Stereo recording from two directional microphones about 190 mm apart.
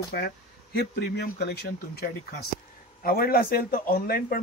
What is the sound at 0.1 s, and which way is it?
Speech, 60° left (ahead or behind).